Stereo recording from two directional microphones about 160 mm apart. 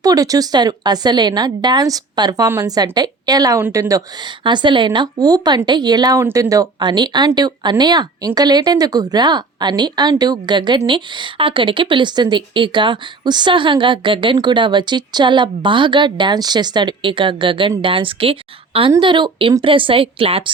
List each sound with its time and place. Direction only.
0.0 s a woman's voice: 20° right (ahead or behind)